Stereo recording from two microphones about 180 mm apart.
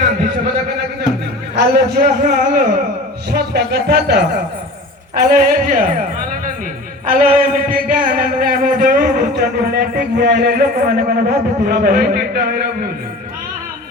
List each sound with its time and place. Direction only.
1.5 s a man's voice: 60° right (ahead or behind)